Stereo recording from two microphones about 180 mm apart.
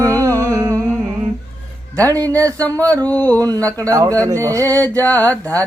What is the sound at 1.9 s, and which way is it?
Speech, 20° right (ahead or behind).